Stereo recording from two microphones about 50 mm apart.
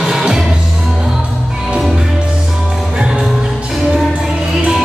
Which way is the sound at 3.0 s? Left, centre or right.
Centre.